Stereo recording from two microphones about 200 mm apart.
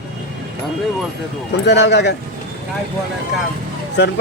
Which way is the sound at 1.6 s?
60° left (ahead or behind).